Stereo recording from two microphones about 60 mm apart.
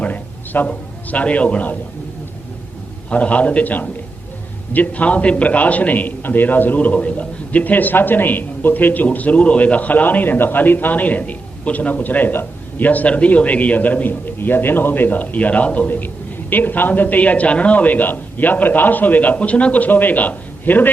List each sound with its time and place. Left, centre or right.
0.0 s a man's voice: left
3.1 s a man's voice: left